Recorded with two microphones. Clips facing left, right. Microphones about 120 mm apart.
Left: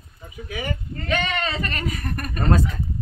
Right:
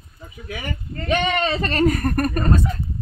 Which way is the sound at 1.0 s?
25° right (ahead or behind).